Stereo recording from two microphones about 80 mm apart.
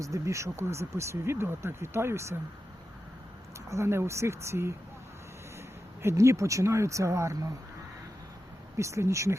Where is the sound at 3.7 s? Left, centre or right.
Right.